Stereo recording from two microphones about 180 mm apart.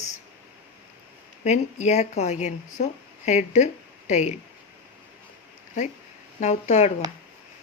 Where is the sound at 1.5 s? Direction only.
40° left (ahead or behind).